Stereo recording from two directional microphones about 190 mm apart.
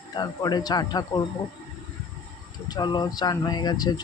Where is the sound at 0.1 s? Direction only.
20° left (ahead or behind).